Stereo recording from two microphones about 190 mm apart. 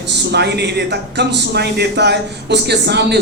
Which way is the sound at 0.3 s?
60° right (ahead or behind).